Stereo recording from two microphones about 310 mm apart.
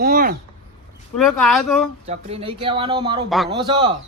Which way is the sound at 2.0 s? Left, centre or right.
Centre.